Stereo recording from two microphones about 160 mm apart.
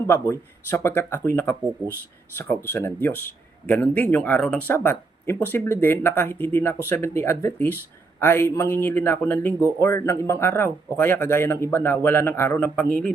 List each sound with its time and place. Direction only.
0.1 s a man's voice: 15° left (ahead or behind)